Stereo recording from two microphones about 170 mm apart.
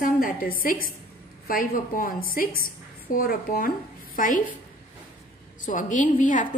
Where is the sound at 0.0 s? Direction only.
55° left (ahead or behind).